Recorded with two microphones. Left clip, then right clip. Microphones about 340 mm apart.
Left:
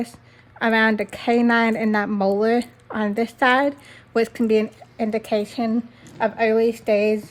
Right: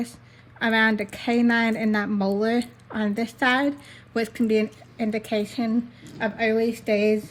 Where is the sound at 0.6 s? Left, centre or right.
Left.